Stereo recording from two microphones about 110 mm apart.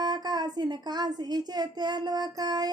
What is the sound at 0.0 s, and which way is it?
A woman's voice, 40° right (ahead or behind).